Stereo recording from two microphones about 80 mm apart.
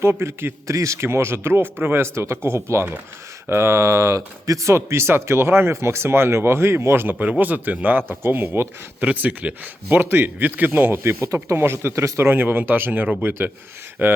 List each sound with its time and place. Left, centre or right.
0.0 s a man's voice: right